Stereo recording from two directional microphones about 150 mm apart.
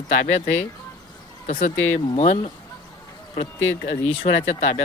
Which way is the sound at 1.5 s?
50° left (ahead or behind).